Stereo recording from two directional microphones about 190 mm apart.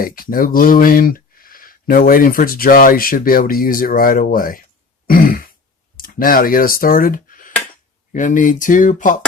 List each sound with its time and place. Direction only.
0.0 s speech: 50° left (ahead or behind)
5.0 s throat clearing: 50° left (ahead or behind)
6.0 s speech: 50° left (ahead or behind)